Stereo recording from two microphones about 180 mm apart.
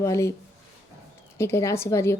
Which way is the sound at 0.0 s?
15° left (ahead or behind).